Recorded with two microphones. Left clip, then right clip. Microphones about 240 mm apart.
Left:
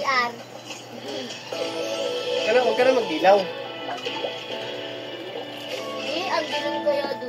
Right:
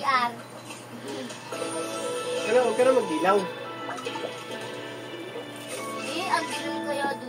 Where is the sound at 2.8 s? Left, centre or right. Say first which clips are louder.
Left 3 dB; centre.